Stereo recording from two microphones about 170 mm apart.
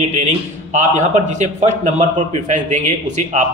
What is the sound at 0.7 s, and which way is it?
A man's voice, 45° right (ahead or behind).